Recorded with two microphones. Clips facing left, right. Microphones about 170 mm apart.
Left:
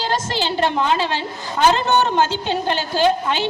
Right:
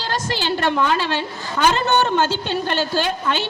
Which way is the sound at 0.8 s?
60° right (ahead or behind).